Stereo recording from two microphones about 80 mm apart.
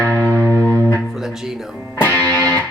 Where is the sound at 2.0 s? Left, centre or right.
Left.